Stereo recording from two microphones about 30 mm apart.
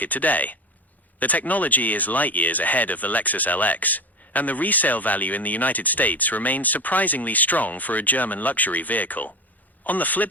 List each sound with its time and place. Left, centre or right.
0.0 s speech: left